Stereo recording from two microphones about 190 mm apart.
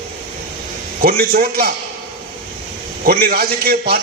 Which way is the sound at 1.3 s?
50° right (ahead or behind).